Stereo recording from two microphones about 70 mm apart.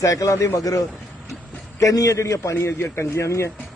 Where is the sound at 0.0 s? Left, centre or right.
Left.